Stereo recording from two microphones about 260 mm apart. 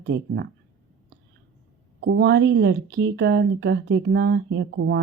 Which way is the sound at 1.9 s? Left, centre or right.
Right.